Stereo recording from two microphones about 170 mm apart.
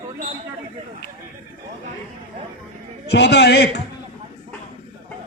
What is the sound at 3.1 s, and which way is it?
Speech, 80° left.